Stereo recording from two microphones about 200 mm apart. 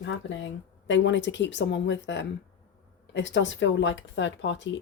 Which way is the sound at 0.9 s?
65° left (ahead or behind).